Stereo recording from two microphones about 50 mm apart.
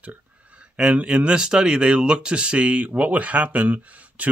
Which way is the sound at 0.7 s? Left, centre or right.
Right.